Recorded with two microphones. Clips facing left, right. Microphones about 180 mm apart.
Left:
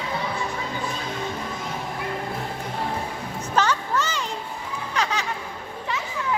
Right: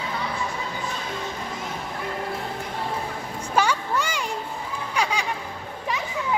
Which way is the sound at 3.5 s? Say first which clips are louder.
Even; 10° right (ahead or behind).